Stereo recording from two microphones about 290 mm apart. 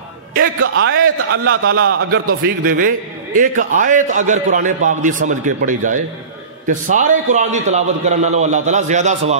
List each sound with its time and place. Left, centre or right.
0.7 s a man's voice: right